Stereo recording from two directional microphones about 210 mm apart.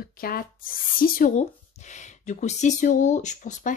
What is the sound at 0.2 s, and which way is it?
Speech, 45° left (ahead or behind).